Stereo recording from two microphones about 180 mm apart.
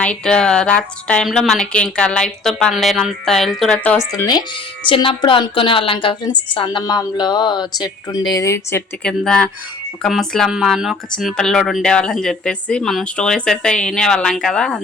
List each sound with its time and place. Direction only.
0.0 s speech: 5° left (ahead or behind)
4.2 s a woman's voice: 20° left (ahead or behind)
9.0 s speech: 5° left (ahead or behind)